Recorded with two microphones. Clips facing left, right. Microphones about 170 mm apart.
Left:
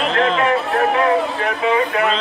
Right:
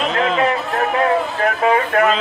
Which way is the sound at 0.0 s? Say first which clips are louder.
Left 1 dB; 5° right (ahead or behind).